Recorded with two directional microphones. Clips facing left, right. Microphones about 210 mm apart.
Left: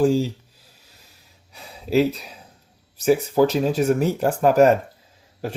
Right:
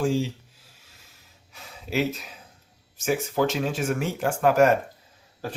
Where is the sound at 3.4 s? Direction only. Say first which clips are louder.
Left 7 dB; 35° left (ahead or behind).